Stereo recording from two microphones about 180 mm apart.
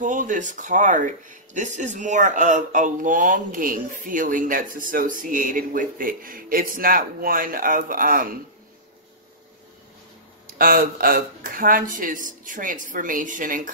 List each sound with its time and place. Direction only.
0.0 s speech: 45° right (ahead or behind)
10.6 s speech: 55° right (ahead or behind)